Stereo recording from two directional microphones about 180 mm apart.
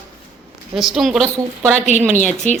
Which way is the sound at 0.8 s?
Centre (ahead or behind).